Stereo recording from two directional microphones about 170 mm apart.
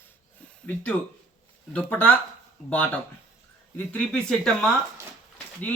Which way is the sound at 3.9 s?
5° left (ahead or behind).